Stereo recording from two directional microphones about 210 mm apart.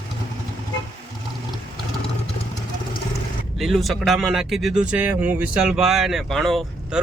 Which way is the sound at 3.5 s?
Centre (ahead or behind).